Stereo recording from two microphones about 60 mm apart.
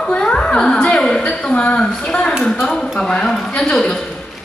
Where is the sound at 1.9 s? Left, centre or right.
Centre.